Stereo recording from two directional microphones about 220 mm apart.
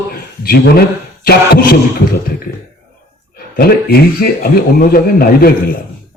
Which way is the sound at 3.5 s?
45° left (ahead or behind).